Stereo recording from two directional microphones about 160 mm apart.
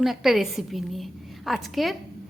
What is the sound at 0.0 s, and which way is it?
A woman's voice, centre (ahead or behind).